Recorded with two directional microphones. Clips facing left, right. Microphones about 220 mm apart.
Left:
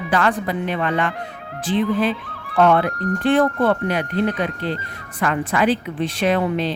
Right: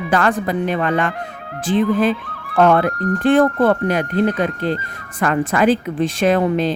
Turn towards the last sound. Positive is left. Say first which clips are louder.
# right 4 dB
turn(degrees=-45)  # may be behind; listen again after turning